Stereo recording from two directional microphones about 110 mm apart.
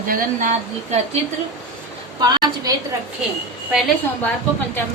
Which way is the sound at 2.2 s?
35° right (ahead or behind).